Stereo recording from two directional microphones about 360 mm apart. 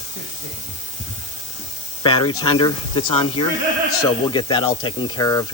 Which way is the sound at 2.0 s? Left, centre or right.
Centre.